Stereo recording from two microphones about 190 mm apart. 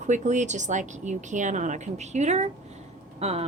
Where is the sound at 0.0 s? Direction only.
40° right (ahead or behind).